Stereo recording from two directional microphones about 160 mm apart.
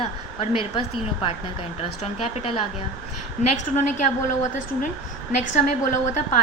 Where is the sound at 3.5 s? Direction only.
50° left (ahead or behind).